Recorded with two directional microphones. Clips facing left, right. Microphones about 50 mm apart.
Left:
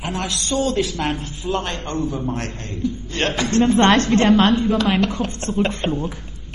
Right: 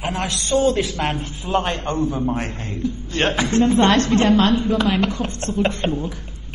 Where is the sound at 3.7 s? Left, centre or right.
Left.